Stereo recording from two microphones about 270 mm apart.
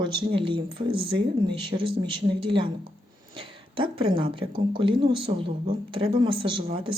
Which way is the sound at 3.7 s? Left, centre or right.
Centre.